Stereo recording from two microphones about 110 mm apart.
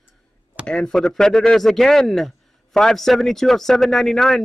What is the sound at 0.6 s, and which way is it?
Speech, 5° left (ahead or behind).